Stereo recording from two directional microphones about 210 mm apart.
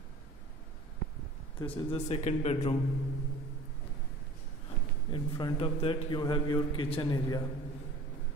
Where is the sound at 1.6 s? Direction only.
25° left (ahead or behind).